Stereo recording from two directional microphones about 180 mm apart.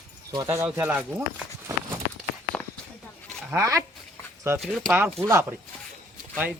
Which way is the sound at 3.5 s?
15° right (ahead or behind).